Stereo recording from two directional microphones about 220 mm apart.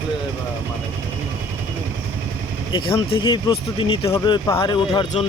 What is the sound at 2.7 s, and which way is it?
Speech, 20° left (ahead or behind).